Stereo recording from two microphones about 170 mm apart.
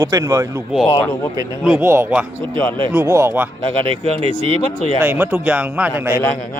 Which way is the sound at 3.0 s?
15° right (ahead or behind).